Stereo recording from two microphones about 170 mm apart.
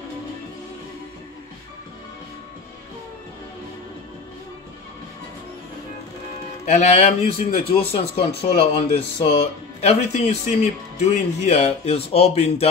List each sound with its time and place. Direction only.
6.6 s speech: 45° left (ahead or behind)